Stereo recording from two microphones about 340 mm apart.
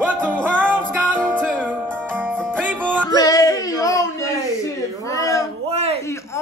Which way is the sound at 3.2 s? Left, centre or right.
Centre.